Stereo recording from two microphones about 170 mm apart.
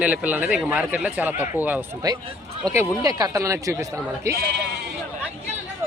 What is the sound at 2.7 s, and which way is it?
A man's voice, 20° right (ahead or behind).